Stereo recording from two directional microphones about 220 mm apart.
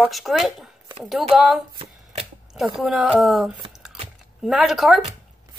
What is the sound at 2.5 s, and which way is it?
A woman's voice, centre (ahead or behind).